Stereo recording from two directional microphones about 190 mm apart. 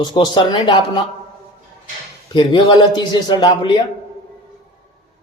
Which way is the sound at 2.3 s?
25° left (ahead or behind).